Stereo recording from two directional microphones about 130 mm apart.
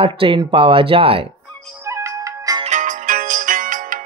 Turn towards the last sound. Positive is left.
turn(degrees=-90)